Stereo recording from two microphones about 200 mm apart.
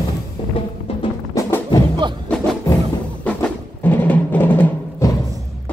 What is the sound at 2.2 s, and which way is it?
Music, 5° left (ahead or behind).